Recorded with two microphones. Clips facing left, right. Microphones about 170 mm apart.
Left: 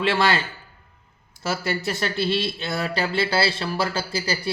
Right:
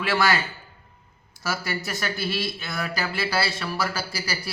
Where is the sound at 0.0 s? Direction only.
30° left (ahead or behind).